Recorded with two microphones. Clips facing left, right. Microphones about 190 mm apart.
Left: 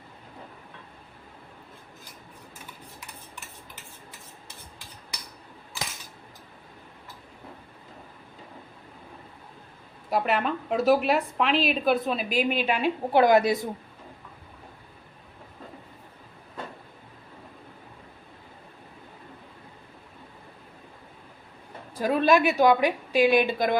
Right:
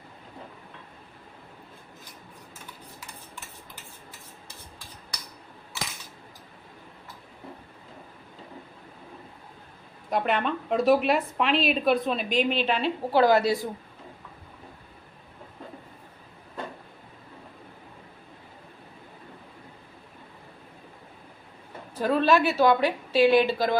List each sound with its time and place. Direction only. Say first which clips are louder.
10.1 s a woman's voice: even; 5° left (ahead or behind)
21.9 s a woman's voice: left 1 dB; 10° left (ahead or behind)